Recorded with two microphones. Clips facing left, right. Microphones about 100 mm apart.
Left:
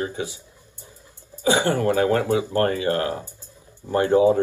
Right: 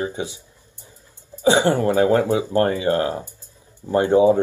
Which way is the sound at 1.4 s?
25° right (ahead or behind).